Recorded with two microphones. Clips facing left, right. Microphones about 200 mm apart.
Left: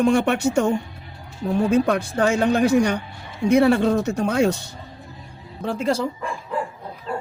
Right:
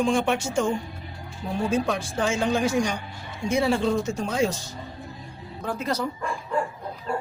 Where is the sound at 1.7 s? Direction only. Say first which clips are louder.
Left 6 dB; 60° left (ahead or behind).